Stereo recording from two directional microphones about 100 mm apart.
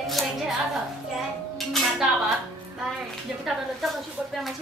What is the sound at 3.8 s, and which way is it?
Speech, centre (ahead or behind).